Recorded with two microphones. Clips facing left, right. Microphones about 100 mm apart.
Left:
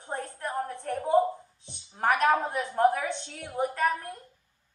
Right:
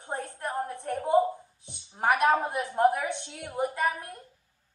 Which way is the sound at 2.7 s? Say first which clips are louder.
Even; 20° right (ahead or behind).